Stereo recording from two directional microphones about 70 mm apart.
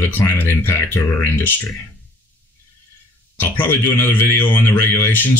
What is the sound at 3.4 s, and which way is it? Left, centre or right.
A man's voice, left.